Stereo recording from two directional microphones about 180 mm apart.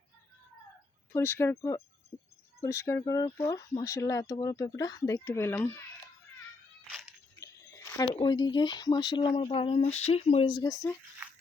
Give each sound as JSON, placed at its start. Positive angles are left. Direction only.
{"t": 1.1, "sound": "speech", "side_deg": 15}
{"t": 7.3, "sound": "speech", "side_deg": 15}